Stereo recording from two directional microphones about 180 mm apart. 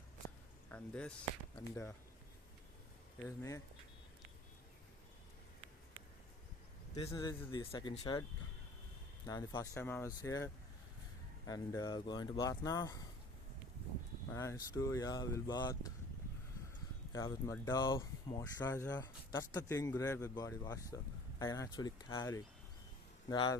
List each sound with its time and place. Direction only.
0.7 s speech: 5° left (ahead or behind)
3.2 s speech: 15° left (ahead or behind)
6.9 s speech: 35° left (ahead or behind)
9.2 s speech: 20° left (ahead or behind)
14.3 s speech: 15° left (ahead or behind)
17.1 s speech: 15° left (ahead or behind)
23.3 s speech: 25° left (ahead or behind)